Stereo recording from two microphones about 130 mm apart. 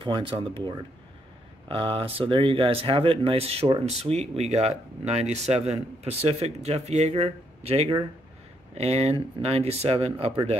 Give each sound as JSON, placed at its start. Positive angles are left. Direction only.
{"t": 0.0, "sound": "speech", "side_deg": -40}
{"t": 3.8, "sound": "speech", "side_deg": -55}